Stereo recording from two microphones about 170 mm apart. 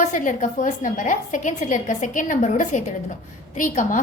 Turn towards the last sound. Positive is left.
turn(degrees=50)  # may be behind; listen again after turning